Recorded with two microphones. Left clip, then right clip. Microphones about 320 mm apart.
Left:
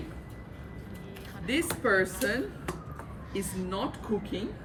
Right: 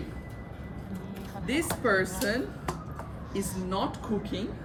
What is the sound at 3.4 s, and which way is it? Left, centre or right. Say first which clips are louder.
Speech: right 2 dB; centre.